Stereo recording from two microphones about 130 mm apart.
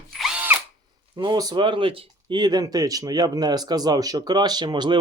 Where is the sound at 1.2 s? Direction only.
30° right (ahead or behind).